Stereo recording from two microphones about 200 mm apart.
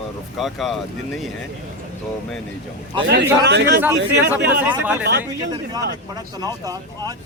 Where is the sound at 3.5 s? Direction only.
55° right (ahead or behind).